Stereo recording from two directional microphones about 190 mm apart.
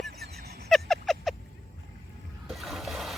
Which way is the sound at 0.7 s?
Centre (ahead or behind).